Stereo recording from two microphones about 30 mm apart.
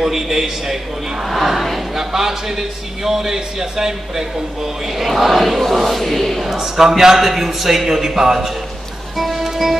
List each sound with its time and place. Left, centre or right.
0.0 s a man's voice: centre
5.1 s chant: centre
6.4 s a man's voice: centre
9.1 s music: centre
9.4 s music: centre